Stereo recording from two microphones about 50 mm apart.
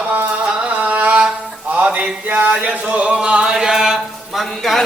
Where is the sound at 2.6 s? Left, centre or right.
Right; by 4.8 s centre.